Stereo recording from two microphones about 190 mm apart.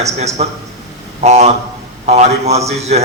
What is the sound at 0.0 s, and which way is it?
A man's voice, 35° right (ahead or behind).